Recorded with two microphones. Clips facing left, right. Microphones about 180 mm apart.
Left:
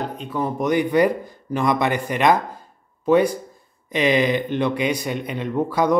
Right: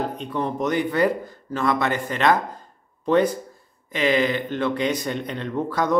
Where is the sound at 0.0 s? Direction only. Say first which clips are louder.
Even; 5° left (ahead or behind).